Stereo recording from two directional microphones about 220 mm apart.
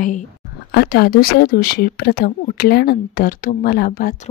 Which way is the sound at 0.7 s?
45° left (ahead or behind).